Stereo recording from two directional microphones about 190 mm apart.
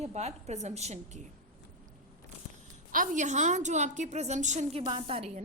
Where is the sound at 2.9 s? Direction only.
45° right (ahead or behind).